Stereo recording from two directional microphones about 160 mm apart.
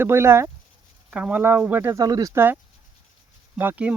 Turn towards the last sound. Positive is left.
turn(degrees=-10)  # may be behind; listen again after turning